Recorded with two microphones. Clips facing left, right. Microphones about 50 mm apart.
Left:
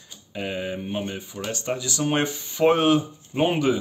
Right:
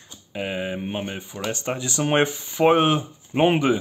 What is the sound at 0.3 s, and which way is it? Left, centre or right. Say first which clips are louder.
Speech: right 1 dB; centre.